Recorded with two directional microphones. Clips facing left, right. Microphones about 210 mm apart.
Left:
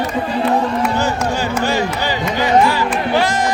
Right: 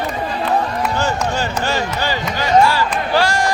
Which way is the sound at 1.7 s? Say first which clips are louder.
Left 2 dB; 15° left (ahead or behind).